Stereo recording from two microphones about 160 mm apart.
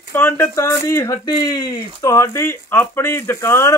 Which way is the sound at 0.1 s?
15° left (ahead or behind).